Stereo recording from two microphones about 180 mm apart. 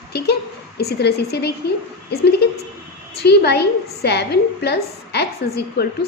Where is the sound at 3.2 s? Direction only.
65° left (ahead or behind).